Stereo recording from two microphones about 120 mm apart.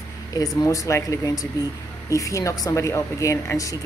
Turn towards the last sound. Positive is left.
turn(degrees=25)  # may be behind; listen again after turning